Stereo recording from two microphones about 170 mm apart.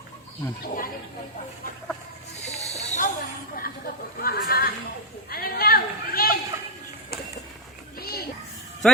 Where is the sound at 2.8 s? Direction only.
40° left (ahead or behind).